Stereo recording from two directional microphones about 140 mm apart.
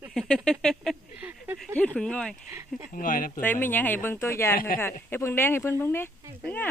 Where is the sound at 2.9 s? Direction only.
75° left (ahead or behind).